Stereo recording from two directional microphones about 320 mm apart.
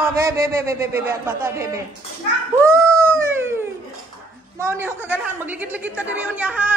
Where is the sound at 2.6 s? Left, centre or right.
Centre.